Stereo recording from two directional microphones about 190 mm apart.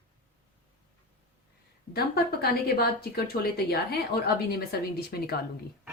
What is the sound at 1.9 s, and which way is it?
Speech, 55° left (ahead or behind).